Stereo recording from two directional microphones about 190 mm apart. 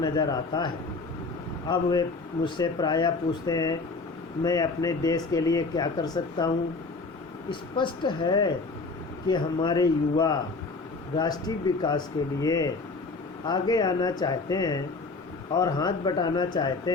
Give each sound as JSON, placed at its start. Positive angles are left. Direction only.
{"t": 0.0, "sound": "speech", "side_deg": 20}
{"t": 7.5, "sound": "speech", "side_deg": 25}